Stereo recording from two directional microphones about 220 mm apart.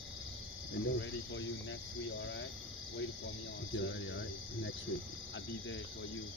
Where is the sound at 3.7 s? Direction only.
60° left (ahead or behind).